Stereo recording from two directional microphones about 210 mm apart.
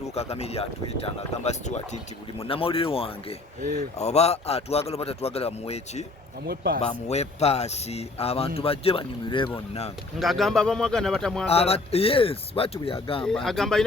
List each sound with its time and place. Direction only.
0.1 s speech: 30° left (ahead or behind)
3.6 s speech: 40° right (ahead or behind)
3.9 s speech: 30° left (ahead or behind)
6.4 s a man's voice: 45° right (ahead or behind)
6.8 s speech: 30° left (ahead or behind)
10.2 s a man's voice: centre (ahead or behind)
11.4 s speech: 30° left (ahead or behind)
13.2 s a man's voice: centre (ahead or behind)